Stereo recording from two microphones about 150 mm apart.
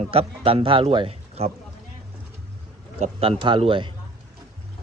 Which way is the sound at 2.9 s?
45° right (ahead or behind).